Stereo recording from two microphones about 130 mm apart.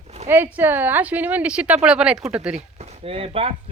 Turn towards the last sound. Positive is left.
turn(degrees=-50)  # may be behind; listen again after turning